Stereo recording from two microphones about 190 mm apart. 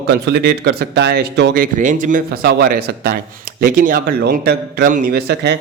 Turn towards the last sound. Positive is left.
turn(degrees=-60)  # may be behind; listen again after turning